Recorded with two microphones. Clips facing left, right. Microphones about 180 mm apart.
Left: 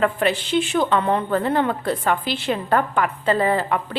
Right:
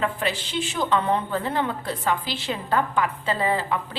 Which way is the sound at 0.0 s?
60° left (ahead or behind).